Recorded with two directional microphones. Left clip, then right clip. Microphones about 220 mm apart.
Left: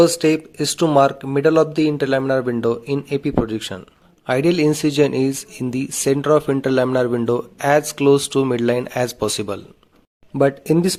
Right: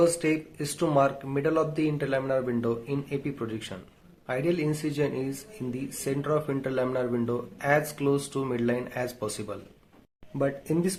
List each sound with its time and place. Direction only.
0.0 s speech: 45° left (ahead or behind)